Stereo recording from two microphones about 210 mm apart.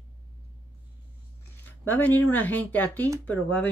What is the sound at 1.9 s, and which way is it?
Speech, 10° left (ahead or behind).